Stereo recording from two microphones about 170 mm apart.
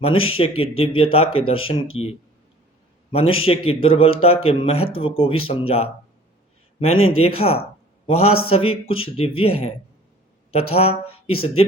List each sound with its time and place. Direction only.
0.0 s speech: 35° left (ahead or behind)
3.1 s speech: 35° left (ahead or behind)